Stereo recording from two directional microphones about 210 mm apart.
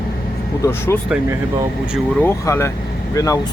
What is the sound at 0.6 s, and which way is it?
Speech, 10° left (ahead or behind).